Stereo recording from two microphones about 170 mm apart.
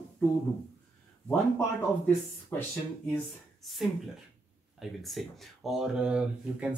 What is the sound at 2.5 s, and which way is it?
Speech, 10° left (ahead or behind).